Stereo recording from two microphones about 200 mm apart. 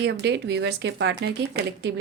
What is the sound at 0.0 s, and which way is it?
Speech, 60° right (ahead or behind).